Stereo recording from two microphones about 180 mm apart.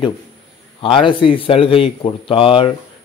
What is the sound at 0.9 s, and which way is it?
Speech, 30° left (ahead or behind).